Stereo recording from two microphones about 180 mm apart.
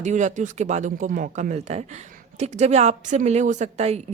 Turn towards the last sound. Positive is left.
turn(degrees=-35)  # may be behind; listen again after turning